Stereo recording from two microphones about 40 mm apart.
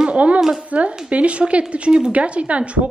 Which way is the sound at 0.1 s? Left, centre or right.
Right.